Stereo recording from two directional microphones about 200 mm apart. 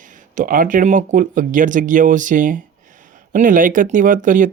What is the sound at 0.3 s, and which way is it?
Speech, 45° right (ahead or behind).